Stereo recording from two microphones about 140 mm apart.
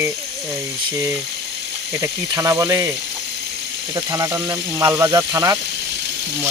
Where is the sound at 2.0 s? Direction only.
25° right (ahead or behind).